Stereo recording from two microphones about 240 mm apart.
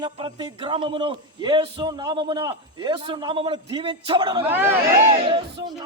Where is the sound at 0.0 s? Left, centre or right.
Centre.